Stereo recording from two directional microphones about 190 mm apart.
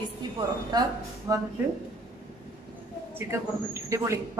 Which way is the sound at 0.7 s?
20° right (ahead or behind).